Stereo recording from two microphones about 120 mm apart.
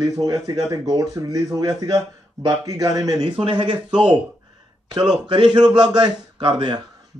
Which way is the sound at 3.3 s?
45° right (ahead or behind).